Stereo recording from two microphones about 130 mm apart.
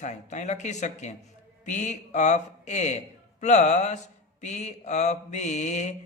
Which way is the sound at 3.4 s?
65° left (ahead or behind).